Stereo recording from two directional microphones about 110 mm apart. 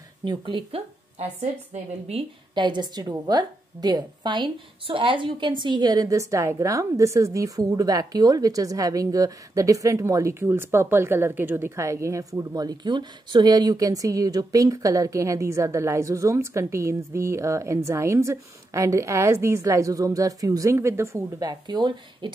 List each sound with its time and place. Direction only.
0.2 s a woman's voice: 45° right (ahead or behind); by 2.2 s 65° right (ahead or behind)
2.5 s a woman's voice: 45° right (ahead or behind)